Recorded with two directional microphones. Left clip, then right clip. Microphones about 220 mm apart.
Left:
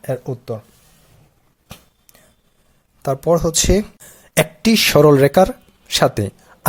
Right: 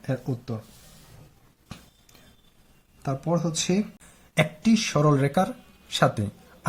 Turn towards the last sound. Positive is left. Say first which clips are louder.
# left 7 dB
turn(degrees=40)  # may be behind; listen again after turning